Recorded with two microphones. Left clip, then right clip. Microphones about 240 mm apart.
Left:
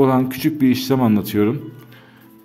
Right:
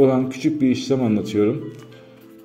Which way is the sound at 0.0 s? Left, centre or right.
Left.